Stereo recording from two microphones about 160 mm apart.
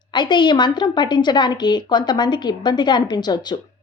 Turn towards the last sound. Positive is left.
turn(degrees=25)  # may be behind; listen again after turning